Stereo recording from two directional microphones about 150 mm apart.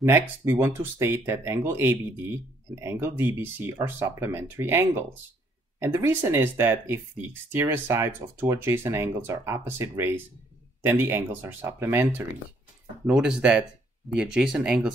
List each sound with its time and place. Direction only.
0.0 s speech: 15° right (ahead or behind)